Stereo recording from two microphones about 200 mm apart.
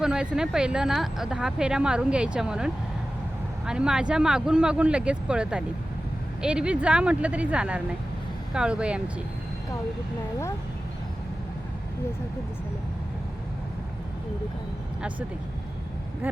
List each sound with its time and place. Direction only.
0.0 s speech: 5° right (ahead or behind)
16.2 s speech: 10° right (ahead or behind)